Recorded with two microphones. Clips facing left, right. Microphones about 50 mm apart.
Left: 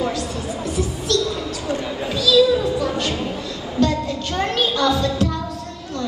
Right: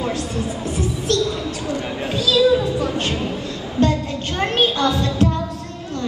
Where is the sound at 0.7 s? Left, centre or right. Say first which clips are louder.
Right 1 dB; right.